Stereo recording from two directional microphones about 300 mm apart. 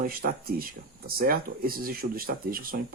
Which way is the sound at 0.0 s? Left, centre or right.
Right.